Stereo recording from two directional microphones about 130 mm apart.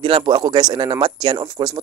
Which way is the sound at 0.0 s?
40° right (ahead or behind).